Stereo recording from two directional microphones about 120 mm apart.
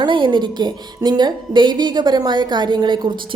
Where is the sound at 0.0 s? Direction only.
45° right (ahead or behind).